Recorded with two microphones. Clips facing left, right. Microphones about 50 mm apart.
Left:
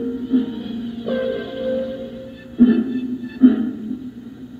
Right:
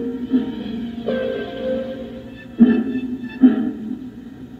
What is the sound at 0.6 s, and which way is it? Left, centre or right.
Music, centre.